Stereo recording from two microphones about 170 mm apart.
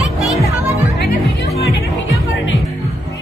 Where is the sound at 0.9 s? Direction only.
75° left (ahead or behind).